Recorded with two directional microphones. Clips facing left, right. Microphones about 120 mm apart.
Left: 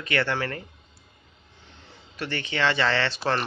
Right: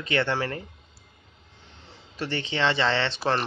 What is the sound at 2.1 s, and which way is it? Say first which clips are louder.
Speech: right 1 dB; 25° right (ahead or behind).